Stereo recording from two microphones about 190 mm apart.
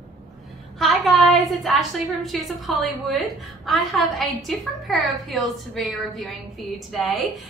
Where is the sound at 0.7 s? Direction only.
Centre (ahead or behind).